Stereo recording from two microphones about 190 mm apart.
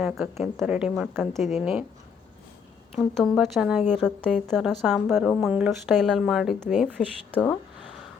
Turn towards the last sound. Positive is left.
turn(degrees=0)  # may be behind; listen again after turning